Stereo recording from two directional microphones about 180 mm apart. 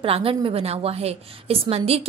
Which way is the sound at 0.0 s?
30° right (ahead or behind).